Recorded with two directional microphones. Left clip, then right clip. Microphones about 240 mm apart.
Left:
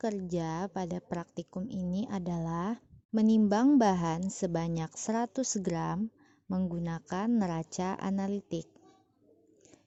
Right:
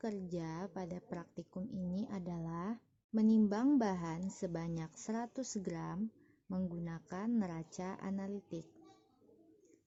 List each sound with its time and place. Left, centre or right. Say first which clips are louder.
0.0 s a woman's voice: left 9 dB; left